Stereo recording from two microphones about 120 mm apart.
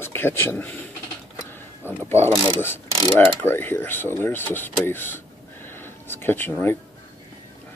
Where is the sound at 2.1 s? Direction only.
20° left (ahead or behind).